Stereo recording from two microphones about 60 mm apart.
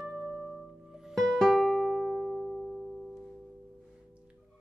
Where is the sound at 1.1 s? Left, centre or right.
Centre.